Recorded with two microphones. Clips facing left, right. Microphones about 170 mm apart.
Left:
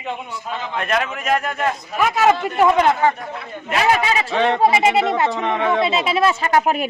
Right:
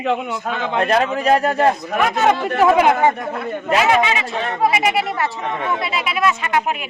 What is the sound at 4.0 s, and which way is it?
Speech, 35° left (ahead or behind).